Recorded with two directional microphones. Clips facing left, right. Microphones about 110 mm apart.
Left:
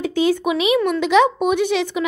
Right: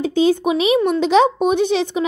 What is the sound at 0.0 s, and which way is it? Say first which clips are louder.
A woman's voice: right 2 dB; 30° right (ahead or behind).